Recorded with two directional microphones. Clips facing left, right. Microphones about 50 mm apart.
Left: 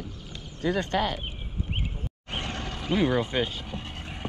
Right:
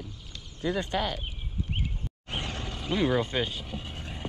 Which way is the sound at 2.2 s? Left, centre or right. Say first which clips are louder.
Left 2 dB; left.